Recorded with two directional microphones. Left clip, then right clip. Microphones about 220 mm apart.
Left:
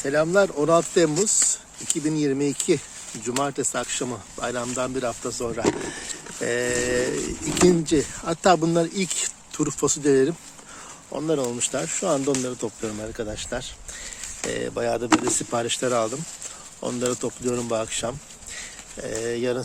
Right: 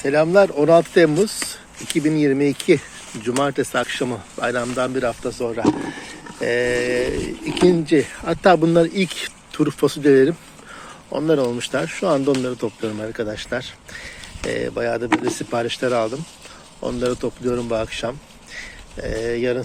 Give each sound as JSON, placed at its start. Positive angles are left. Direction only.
{"t": 0.0, "sound": "speech", "side_deg": 15}